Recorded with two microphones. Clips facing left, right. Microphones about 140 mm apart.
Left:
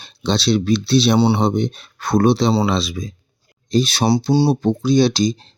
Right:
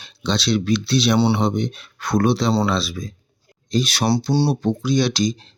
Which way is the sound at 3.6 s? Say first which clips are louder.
Left 3 dB; 30° left (ahead or behind).